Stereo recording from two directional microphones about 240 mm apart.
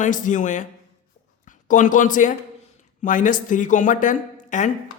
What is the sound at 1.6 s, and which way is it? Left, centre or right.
A woman's voice, left.